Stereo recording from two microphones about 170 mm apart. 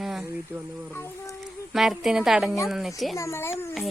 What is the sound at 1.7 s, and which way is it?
Speech, centre (ahead or behind).